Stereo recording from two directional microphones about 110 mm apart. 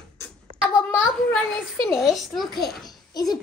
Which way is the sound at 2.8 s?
35° left (ahead or behind).